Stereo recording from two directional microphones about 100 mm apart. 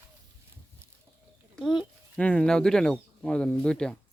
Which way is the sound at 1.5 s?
Centre (ahead or behind).